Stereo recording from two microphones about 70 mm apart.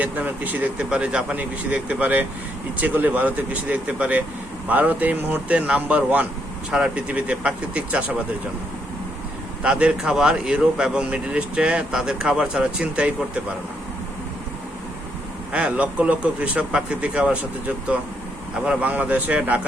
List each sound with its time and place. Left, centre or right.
0.0 s speech: right
9.6 s speech: centre
15.5 s speech: centre
18.6 s speech: centre